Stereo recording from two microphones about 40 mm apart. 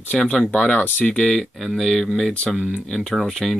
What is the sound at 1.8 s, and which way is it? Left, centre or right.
Speech, centre.